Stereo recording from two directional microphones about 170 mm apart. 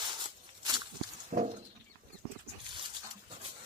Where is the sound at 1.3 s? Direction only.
45° right (ahead or behind).